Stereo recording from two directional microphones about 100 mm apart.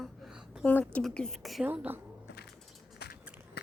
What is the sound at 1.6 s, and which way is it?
Speech, 20° right (ahead or behind).